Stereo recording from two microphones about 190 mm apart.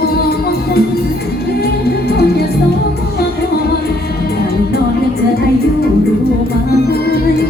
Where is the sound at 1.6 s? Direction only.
55° left (ahead or behind).